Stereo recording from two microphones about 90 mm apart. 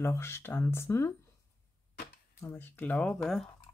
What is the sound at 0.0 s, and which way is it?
Speech, 30° left (ahead or behind).